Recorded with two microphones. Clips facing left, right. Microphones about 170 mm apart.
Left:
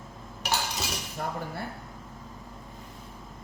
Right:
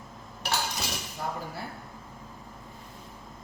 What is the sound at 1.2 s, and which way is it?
Speech, 50° left (ahead or behind).